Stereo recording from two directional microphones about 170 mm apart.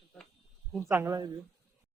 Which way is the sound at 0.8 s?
15° right (ahead or behind).